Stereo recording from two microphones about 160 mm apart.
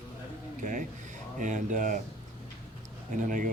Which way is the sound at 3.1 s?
55° right (ahead or behind).